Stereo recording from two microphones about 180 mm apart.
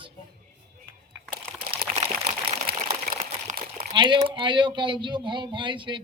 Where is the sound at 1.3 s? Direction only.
50° right (ahead or behind).